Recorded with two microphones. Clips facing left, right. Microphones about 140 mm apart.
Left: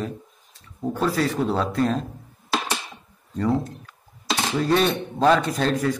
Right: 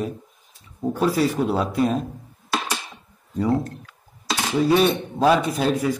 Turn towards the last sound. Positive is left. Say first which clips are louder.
# right 1 dB
turn(degrees=-10)  # may be behind; listen again after turning